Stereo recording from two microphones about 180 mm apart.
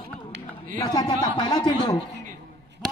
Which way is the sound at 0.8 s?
20° left (ahead or behind).